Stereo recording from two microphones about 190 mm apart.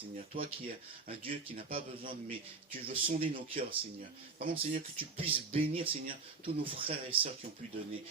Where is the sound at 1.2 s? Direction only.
30° right (ahead or behind).